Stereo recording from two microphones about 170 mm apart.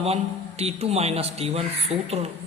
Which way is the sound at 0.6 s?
40° right (ahead or behind).